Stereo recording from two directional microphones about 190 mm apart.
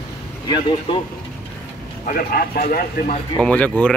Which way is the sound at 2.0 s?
50° left (ahead or behind).